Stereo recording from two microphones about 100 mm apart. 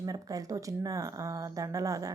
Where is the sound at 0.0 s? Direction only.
35° right (ahead or behind).